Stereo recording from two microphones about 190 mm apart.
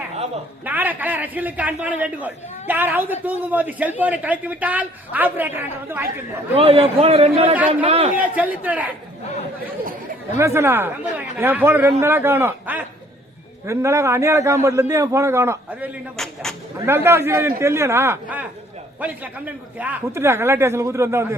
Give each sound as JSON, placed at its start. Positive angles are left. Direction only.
{"t": 0.6, "sound": "a man's voice", "side_deg": -10}
{"t": 6.6, "sound": "speech", "side_deg": -30}
{"t": 8.1, "sound": "a man's voice", "side_deg": -10}
{"t": 10.3, "sound": "a man's voice", "side_deg": -15}
{"t": 16.1, "sound": "speech", "side_deg": 0}
{"t": 16.8, "sound": "a man's voice", "side_deg": -15}